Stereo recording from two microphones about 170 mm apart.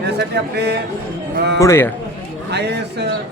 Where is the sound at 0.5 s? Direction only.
70° right (ahead or behind).